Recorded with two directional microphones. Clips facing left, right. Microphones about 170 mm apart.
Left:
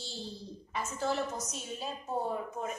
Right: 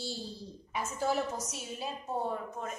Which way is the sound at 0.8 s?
10° right (ahead or behind).